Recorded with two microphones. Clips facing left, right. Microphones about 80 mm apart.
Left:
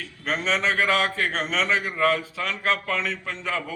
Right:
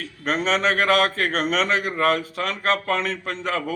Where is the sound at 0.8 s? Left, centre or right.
Right.